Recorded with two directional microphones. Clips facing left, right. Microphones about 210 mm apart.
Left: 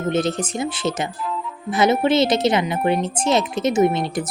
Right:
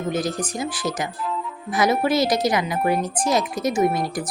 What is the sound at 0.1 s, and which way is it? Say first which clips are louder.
Speech: left 4 dB; 25° left (ahead or behind).